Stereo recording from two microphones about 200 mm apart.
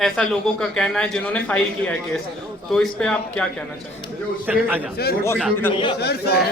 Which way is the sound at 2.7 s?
5° left (ahead or behind).